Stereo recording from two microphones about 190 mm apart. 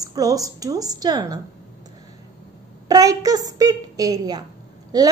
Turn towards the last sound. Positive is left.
turn(degrees=-20)  # may be behind; listen again after turning